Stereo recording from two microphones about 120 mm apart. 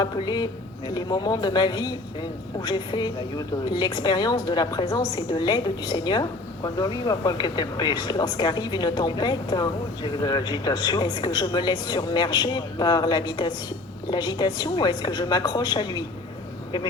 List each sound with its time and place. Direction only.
0.0 s a woman's voice: 35° left (ahead or behind)